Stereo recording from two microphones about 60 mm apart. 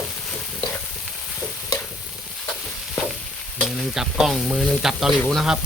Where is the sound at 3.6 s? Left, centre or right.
Centre.